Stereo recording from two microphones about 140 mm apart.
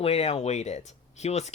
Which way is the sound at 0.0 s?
45° left (ahead or behind).